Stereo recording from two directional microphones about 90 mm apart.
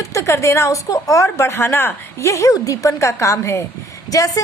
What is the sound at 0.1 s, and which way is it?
A woman's voice, 30° left (ahead or behind).